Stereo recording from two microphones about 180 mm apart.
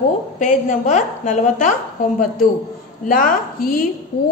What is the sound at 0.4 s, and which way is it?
A woman's voice, 45° left (ahead or behind).